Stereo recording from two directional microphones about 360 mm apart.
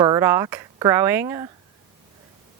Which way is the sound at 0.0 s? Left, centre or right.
Centre.